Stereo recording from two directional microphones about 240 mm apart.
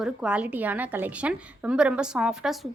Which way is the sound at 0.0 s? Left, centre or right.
Centre.